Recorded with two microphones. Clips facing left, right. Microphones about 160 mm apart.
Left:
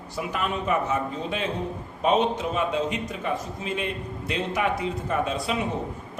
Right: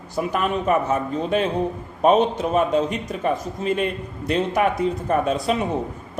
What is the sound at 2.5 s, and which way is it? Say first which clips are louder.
A man's voice: right 6 dB; 50° right (ahead or behind).